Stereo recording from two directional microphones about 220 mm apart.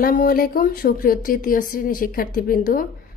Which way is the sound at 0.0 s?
40° left (ahead or behind).